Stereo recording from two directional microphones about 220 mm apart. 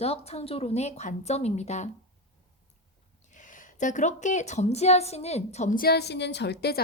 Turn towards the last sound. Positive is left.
turn(degrees=45)  # may be behind; listen again after turning